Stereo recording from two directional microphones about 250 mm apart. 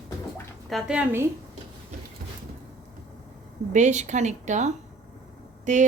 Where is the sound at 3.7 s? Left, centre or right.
Right.